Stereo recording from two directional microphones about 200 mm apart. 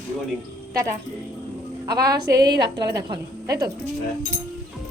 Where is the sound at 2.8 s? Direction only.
20° right (ahead or behind).